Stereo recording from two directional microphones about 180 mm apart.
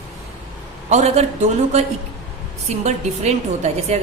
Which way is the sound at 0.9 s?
40° right (ahead or behind).